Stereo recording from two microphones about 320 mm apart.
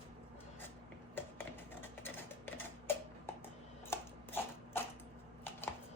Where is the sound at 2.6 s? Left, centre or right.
Centre.